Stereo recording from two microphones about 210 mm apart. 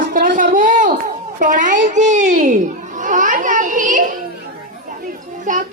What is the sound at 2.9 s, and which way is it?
Children playing, 35° right (ahead or behind).